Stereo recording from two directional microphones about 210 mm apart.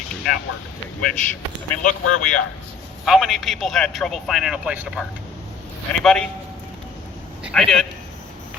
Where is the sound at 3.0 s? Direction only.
Centre (ahead or behind).